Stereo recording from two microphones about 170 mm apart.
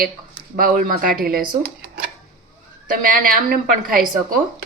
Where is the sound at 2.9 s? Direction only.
55° right (ahead or behind).